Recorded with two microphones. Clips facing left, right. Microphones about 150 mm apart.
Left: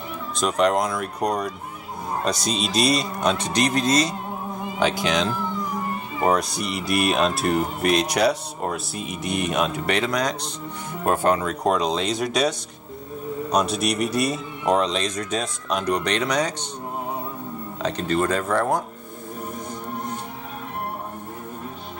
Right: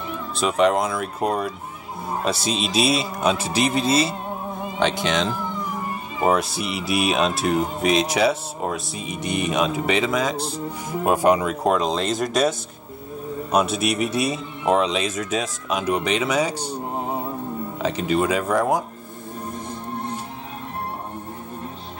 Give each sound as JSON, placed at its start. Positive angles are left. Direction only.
{"t": 0.4, "sound": "speech", "side_deg": -5}
{"t": 11.6, "sound": "speech", "side_deg": 0}
{"t": 17.8, "sound": "speech", "side_deg": -5}